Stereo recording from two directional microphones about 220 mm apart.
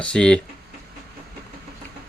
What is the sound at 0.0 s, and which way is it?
Speech, 5° left (ahead or behind).